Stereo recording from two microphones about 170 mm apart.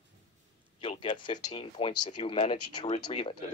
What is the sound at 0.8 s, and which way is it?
Speech, 30° left (ahead or behind).